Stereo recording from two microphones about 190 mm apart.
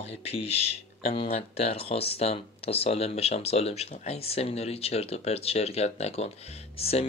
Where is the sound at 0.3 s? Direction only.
30° left (ahead or behind).